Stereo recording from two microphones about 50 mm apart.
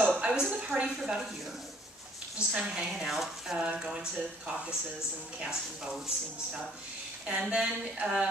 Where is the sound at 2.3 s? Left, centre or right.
Centre.